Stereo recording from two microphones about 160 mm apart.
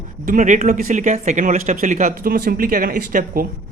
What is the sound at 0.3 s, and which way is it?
Speech, 50° right (ahead or behind).